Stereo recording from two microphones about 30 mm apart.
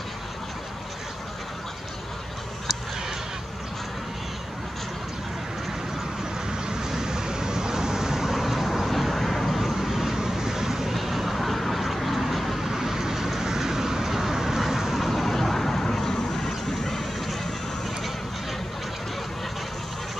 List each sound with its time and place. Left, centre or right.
6.8 s vehicle: centre
9.7 s vehicle: centre
10.9 s vehicle: centre
12.6 s vehicle: centre
15.0 s vehicle: centre